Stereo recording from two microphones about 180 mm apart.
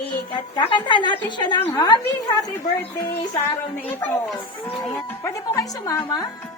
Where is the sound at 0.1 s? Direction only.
25° left (ahead or behind).